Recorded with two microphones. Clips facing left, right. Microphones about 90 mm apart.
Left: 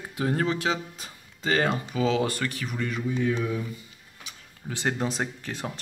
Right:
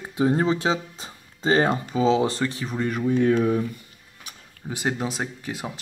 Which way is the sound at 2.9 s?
50° right (ahead or behind).